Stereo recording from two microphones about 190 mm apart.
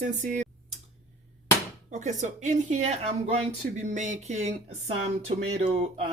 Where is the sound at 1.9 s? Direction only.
40° right (ahead or behind).